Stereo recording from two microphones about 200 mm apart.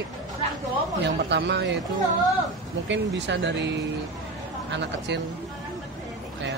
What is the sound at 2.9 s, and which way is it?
Speech, 60° right (ahead or behind).